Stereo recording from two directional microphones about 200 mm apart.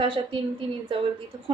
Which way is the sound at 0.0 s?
25° right (ahead or behind).